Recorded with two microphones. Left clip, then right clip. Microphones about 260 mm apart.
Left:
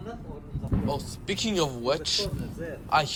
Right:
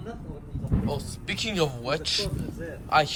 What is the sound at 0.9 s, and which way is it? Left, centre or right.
Speech, centre.